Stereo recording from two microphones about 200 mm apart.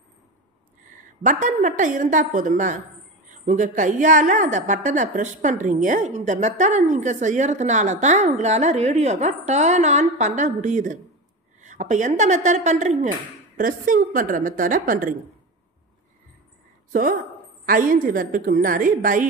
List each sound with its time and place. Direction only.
0.8 s a woman's voice: 40° right (ahead or behind)
16.9 s a woman's voice: 45° right (ahead or behind)